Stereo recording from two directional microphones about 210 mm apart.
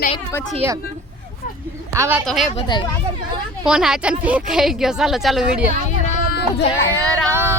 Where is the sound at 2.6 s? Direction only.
20° left (ahead or behind).